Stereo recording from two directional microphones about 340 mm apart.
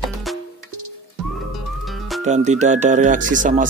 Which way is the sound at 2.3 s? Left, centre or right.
Centre.